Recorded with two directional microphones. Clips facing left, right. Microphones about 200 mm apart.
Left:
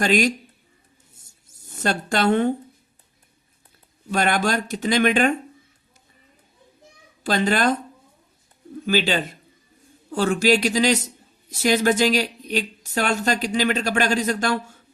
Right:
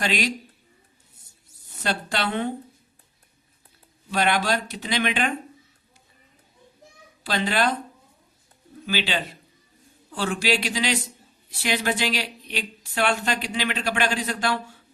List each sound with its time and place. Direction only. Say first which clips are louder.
0.0 s a man's voice: left 6 dB; 45° left (ahead or behind)
1.5 s speech: left 4 dB; 45° left (ahead or behind)
4.1 s a man's voice: left 2 dB; 45° left (ahead or behind)
7.3 s a man's voice: left 4 dB; 45° left (ahead or behind)
8.9 s a man's voice: left 6 dB; 45° left (ahead or behind)